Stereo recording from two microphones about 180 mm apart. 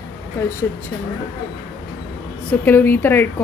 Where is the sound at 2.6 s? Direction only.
10° left (ahead or behind).